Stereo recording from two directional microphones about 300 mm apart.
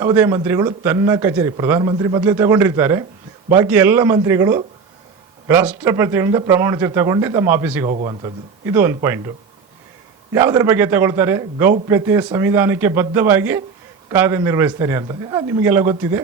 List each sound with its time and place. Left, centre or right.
0.0 s a man's voice: centre
10.3 s a man's voice: centre